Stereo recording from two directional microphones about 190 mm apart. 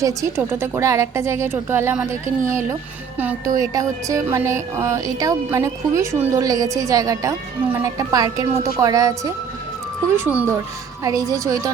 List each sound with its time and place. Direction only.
0.0 s music: 15° right (ahead or behind)